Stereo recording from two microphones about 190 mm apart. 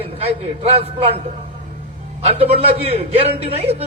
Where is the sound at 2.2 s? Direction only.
30° right (ahead or behind).